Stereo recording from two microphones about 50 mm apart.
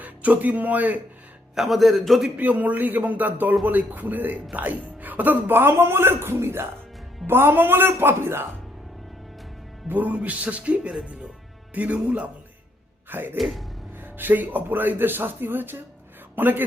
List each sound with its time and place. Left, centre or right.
0.0 s speech: right
1.5 s a man's voice: centre
2.4 s speech: right
9.9 s music: right
13.1 s music: right
13.3 s a man's voice: centre
14.0 s a woman's voice: right